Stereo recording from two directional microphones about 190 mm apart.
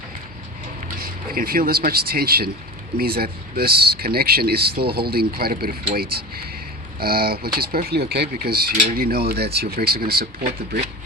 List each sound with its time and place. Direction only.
0.9 s speech: 50° right (ahead or behind)